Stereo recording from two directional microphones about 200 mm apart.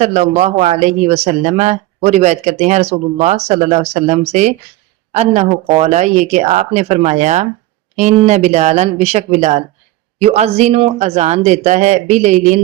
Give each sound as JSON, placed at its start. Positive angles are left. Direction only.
{"t": 0.0, "sound": "speech", "side_deg": -35}